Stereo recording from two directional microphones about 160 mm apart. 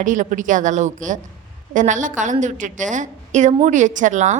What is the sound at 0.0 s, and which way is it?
A woman's voice, 55° right (ahead or behind).